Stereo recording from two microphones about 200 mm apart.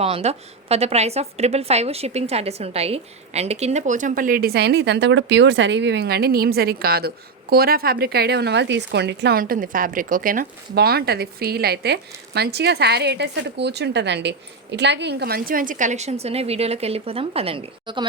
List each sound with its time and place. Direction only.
0.0 s a woman's voice: 30° right (ahead or behind)